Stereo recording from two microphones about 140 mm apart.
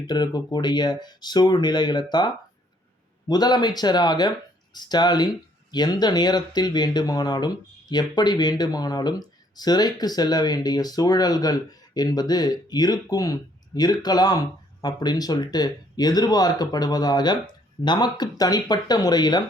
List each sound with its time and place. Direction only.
0.1 s speech: 30° left (ahead or behind)